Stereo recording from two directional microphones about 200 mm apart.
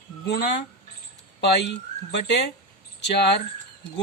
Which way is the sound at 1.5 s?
60° left (ahead or behind).